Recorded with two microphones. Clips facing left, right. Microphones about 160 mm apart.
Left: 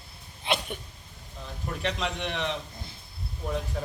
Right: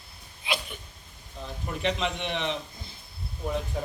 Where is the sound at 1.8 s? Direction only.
Centre (ahead or behind).